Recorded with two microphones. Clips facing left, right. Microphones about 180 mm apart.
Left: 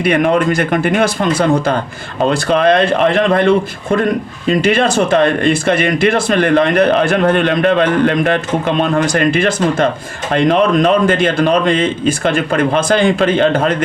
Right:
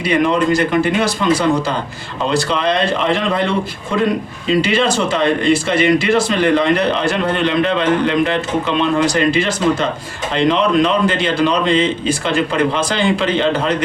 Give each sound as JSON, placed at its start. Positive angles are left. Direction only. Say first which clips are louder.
{"t": 0.0, "sound": "speech", "louder": "left 2 dB", "side_deg": 55}